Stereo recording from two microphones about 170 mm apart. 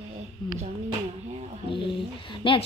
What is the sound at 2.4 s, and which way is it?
Speech, 30° left (ahead or behind).